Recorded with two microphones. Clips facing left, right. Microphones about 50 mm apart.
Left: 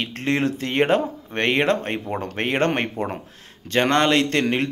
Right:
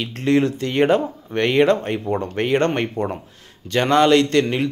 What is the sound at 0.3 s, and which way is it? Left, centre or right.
Speech, centre.